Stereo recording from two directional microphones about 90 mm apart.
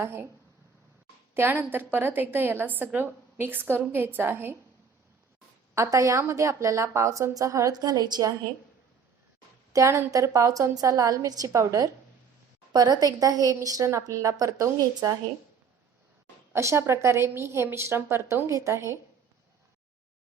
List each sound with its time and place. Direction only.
0.0 s a woman's voice: 25° right (ahead or behind)
1.3 s a woman's voice: 25° right (ahead or behind)
5.7 s a woman's voice: 35° right (ahead or behind)
9.7 s a woman's voice: 35° right (ahead or behind)
16.5 s a woman's voice: 30° right (ahead or behind)